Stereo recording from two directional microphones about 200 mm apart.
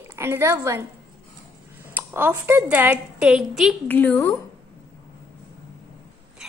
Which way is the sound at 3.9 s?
10° left (ahead or behind).